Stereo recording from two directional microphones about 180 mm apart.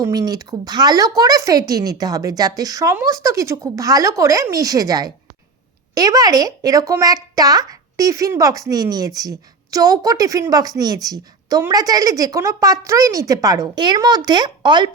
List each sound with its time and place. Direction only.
0.0 s a woman's voice: 20° right (ahead or behind)